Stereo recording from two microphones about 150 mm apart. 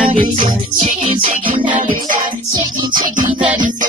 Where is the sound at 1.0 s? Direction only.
35° right (ahead or behind).